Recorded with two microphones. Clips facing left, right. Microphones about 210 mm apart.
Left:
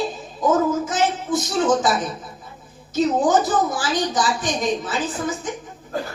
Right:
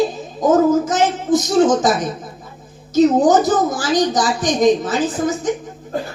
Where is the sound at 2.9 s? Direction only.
40° right (ahead or behind).